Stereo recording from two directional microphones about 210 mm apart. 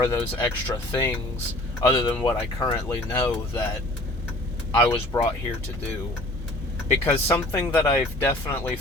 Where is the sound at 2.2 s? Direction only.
20° left (ahead or behind).